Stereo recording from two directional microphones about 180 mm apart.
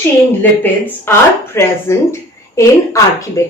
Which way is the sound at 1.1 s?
10° left (ahead or behind).